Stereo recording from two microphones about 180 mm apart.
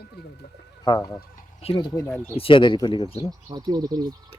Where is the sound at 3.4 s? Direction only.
20° right (ahead or behind).